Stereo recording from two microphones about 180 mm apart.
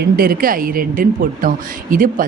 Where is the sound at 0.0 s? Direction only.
55° right (ahead or behind).